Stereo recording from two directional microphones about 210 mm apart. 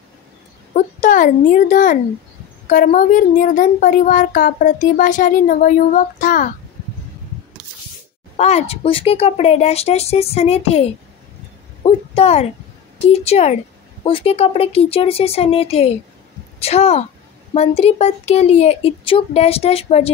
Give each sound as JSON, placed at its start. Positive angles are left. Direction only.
{"t": 0.7, "sound": "a child's voice", "side_deg": 35}
{"t": 8.4, "sound": "speech", "side_deg": 30}
{"t": 11.8, "sound": "a sound", "side_deg": 30}
{"t": 13.1, "sound": "a child's voice", "side_deg": 30}